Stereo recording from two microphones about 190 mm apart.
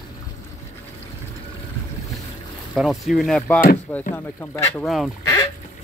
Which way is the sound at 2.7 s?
Centre (ahead or behind).